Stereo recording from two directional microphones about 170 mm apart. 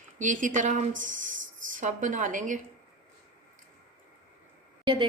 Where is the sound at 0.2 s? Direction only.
50° right (ahead or behind).